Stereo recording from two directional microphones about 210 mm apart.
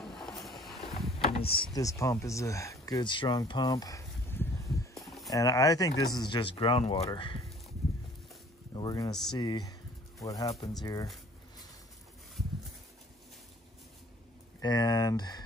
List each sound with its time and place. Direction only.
0.0 s boat: centre (ahead or behind)
1.2 s a sound: 30° left (ahead or behind)
1.7 s a sound: 15° left (ahead or behind); by 5.3 s centre (ahead or behind)
5.3 s speech: 15° left (ahead or behind)
8.7 s speech: 20° left (ahead or behind)
14.6 s speech: 20° left (ahead or behind)